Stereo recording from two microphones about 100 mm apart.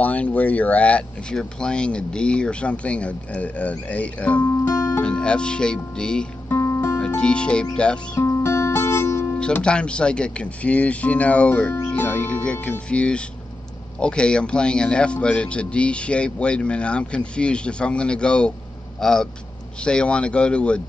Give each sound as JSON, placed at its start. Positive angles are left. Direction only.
{"t": 0.0, "sound": "a man's voice", "side_deg": 15}
{"t": 4.5, "sound": "music", "side_deg": 25}
{"t": 5.0, "sound": "a man's voice", "side_deg": 10}
{"t": 6.5, "sound": "music", "side_deg": 30}
{"t": 7.2, "sound": "a man's voice", "side_deg": 10}
{"t": 8.2, "sound": "music", "side_deg": 25}
{"t": 9.4, "sound": "a man's voice", "side_deg": 10}